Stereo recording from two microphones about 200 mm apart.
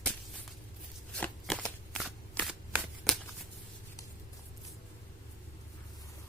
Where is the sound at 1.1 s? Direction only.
5° left (ahead or behind).